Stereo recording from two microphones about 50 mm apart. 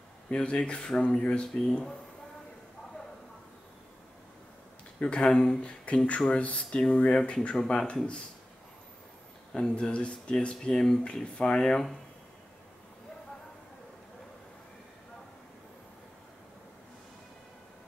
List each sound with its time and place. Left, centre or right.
0.3 s speech: left
1.5 s speech: centre
5.2 s speech: centre
5.6 s speech: left
9.5 s speech: centre
10.5 s speech: centre
11.6 s speech: centre